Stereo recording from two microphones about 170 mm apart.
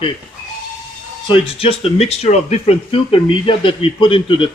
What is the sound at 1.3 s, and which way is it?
Speech, 35° left (ahead or behind).